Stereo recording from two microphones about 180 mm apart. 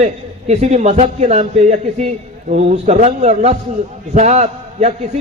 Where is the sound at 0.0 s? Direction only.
35° right (ahead or behind).